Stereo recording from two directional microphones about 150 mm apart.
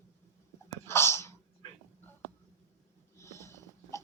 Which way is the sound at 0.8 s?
15° left (ahead or behind).